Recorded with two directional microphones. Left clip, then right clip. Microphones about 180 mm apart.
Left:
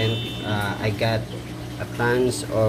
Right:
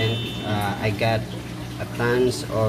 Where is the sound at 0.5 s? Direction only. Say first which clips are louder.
Right 1 dB; 15° left (ahead or behind).